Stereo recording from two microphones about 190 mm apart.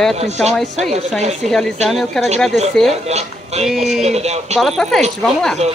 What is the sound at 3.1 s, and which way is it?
Speech, 35° right (ahead or behind).